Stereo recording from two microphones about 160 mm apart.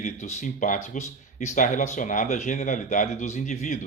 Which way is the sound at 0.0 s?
45° left (ahead or behind).